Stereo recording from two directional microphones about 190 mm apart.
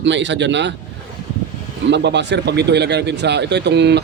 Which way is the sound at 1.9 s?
65° right (ahead or behind).